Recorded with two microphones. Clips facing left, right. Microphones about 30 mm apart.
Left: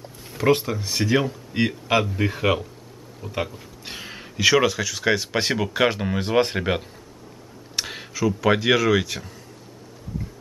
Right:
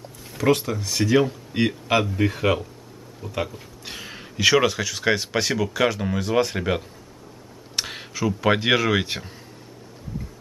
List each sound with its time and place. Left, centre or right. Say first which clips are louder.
0.4 s speech: left 1 dB; centre
3.2 s speech: even; centre
3.8 s speech: left 1 dB; centre
5.4 s speech: left 1 dB; centre
7.7 s computer keyboard: even; centre
8.4 s speech: even; centre